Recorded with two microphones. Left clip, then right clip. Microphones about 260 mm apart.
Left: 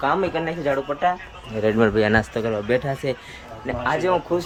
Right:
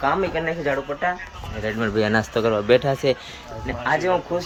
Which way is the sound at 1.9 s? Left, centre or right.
Centre.